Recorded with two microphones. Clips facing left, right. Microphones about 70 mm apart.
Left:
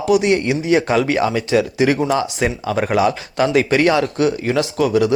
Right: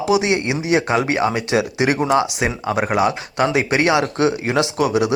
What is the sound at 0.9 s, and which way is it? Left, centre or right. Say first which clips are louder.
Speech: left 1 dB; right.